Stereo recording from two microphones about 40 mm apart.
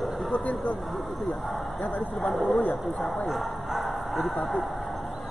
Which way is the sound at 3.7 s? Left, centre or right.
Centre.